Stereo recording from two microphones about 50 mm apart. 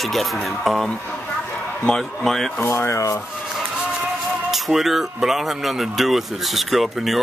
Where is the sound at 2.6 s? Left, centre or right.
Left.